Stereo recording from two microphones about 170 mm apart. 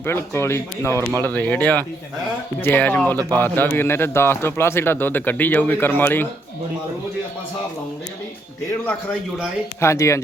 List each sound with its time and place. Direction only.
0.0 s a man's voice: 15° left (ahead or behind)
9.8 s a man's voice: 15° left (ahead or behind)